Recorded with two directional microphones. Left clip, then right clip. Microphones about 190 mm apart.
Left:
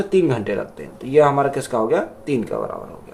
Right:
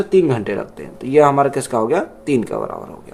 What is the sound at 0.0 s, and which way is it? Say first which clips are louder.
Speech: right 3 dB; 25° right (ahead or behind).